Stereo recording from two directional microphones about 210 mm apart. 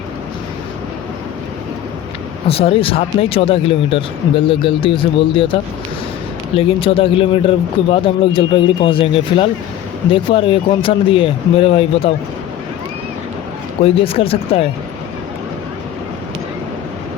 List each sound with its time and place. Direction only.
2.5 s speech: 25° left (ahead or behind)
6.6 s speech: 25° left (ahead or behind)
13.8 s speech: 25° left (ahead or behind)